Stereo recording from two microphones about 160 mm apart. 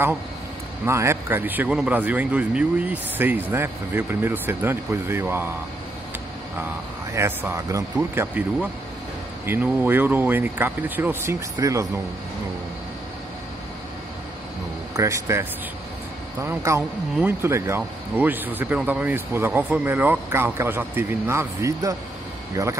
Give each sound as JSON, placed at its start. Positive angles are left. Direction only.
{"t": 0.8, "sound": "speech", "side_deg": -15}
{"t": 6.6, "sound": "speech", "side_deg": -15}
{"t": 15.0, "sound": "speech", "side_deg": -20}